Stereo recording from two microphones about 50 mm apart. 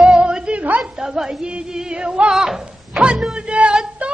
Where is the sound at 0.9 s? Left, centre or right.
Centre.